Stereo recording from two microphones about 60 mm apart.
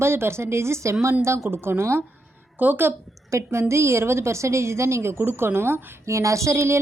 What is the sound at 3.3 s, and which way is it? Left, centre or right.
A woman's voice, right.